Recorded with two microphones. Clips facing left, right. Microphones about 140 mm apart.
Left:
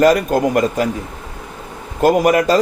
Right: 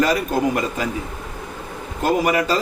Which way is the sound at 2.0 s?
45° left (ahead or behind).